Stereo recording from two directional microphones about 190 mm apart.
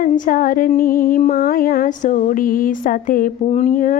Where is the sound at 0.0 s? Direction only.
45° left (ahead or behind).